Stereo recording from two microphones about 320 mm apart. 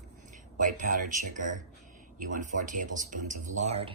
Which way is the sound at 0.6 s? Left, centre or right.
Right.